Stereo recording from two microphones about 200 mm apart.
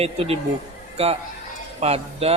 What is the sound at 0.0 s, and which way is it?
Speech, 30° right (ahead or behind).